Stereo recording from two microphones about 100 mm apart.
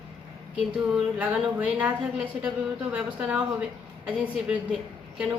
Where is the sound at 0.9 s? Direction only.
15° right (ahead or behind).